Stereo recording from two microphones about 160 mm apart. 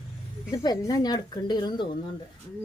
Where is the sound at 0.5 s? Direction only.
20° left (ahead or behind).